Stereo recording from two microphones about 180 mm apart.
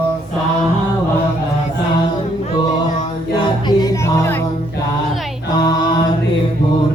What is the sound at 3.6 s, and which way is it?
Music, 20° left (ahead or behind).